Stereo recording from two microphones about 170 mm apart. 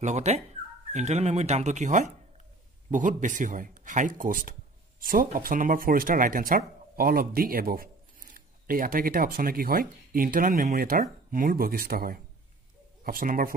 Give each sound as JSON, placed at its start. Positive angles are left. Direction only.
{"t": 0.0, "sound": "speech", "side_deg": -40}